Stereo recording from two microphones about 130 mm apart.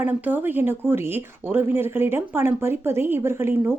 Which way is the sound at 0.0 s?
15° right (ahead or behind).